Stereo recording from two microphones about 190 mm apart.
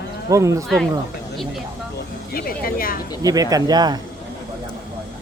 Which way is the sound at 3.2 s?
20° right (ahead or behind).